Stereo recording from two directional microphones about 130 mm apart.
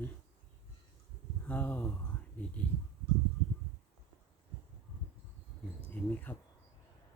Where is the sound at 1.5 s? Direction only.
15° left (ahead or behind).